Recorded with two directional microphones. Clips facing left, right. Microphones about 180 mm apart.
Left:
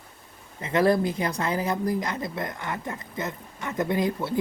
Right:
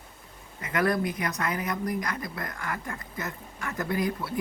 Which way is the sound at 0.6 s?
25° left (ahead or behind).